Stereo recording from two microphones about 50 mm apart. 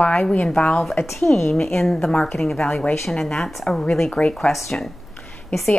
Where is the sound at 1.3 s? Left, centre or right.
Left.